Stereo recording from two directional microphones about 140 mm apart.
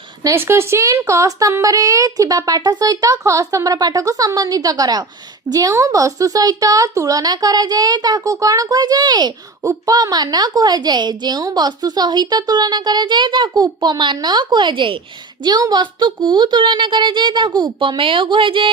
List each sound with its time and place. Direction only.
0.2 s speech: 20° right (ahead or behind); by 18.7 s 35° right (ahead or behind)